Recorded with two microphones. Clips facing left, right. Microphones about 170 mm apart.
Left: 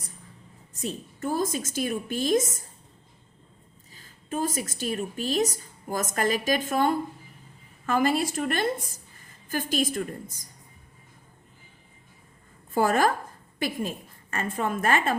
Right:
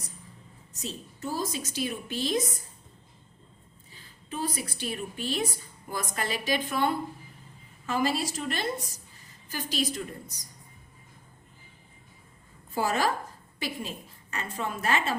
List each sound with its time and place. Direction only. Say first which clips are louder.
0.7 s a woman's voice: left 5 dB; 55° left (ahead or behind)
3.9 s a woman's voice: left 5 dB; 45° left (ahead or behind)
12.7 s a woman's voice: left 5 dB; 50° left (ahead or behind)